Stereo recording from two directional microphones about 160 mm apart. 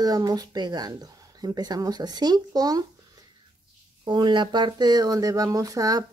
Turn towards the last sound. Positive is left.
turn(degrees=-20)  # may be behind; listen again after turning